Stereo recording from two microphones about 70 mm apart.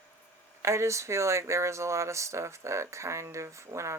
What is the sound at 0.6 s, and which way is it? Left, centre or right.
Speech, right.